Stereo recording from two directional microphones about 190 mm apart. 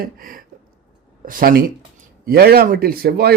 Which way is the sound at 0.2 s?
50° right (ahead or behind).